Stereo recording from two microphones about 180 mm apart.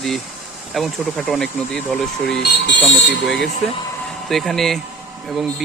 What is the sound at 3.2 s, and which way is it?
Speech, centre (ahead or behind).